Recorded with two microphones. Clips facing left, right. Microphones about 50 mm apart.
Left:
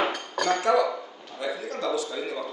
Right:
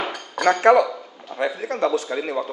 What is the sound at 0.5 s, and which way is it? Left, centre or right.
Speech, right.